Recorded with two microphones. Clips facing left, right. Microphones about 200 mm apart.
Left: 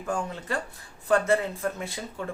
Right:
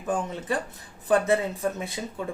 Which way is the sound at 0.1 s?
15° right (ahead or behind).